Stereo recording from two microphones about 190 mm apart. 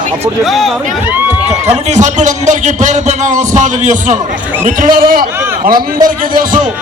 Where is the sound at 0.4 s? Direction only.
Centre (ahead or behind).